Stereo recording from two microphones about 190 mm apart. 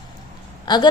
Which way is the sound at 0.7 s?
20° left (ahead or behind).